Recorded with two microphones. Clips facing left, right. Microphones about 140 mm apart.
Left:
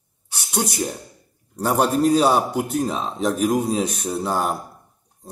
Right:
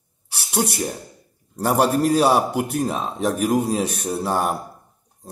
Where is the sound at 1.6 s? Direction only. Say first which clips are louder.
Even; 5° right (ahead or behind).